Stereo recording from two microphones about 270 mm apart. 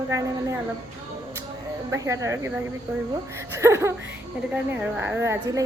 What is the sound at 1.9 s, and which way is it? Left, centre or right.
A woman's voice, centre.